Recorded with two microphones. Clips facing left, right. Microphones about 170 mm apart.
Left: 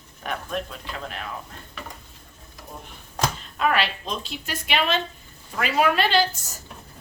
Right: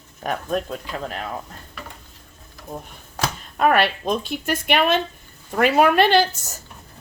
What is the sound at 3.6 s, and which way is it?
A woman's voice, 50° right (ahead or behind).